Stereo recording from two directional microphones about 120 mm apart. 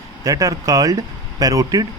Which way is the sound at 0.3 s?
30° right (ahead or behind).